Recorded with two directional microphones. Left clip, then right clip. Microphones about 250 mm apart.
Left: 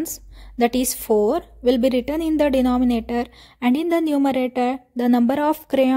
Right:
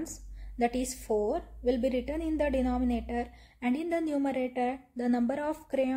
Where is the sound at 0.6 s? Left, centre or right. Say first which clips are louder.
Left 10 dB; left.